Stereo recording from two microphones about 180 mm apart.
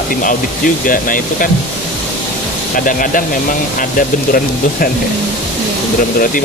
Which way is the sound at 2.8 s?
50° left (ahead or behind).